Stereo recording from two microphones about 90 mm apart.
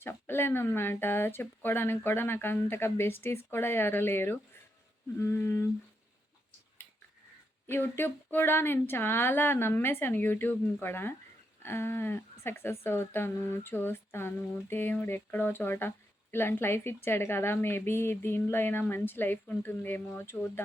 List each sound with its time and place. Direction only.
0.0 s speech: 25° left (ahead or behind)
7.7 s speech: 25° left (ahead or behind)